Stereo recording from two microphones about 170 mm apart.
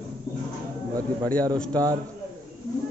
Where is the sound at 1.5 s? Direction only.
5° left (ahead or behind).